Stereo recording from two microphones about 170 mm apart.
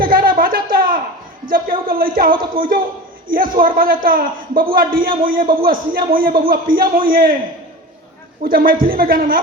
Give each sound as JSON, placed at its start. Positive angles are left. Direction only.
{"t": 0.0, "sound": "a sound", "side_deg": -60}
{"t": 1.9, "sound": "a man's voice", "side_deg": -60}
{"t": 8.4, "sound": "a man's voice", "side_deg": -60}